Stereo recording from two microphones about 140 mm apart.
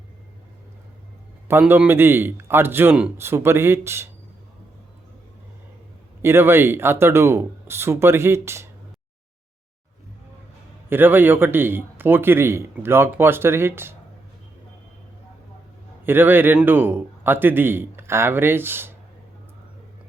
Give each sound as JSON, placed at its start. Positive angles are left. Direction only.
{"t": 1.5, "sound": "a man's voice", "side_deg": -15}
{"t": 6.2, "sound": "a man's voice", "side_deg": -15}
{"t": 10.8, "sound": "a man's voice", "side_deg": -15}
{"t": 16.0, "sound": "a man's voice", "side_deg": -15}